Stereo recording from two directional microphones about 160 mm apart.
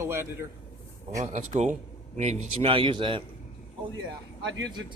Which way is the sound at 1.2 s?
45° right (ahead or behind).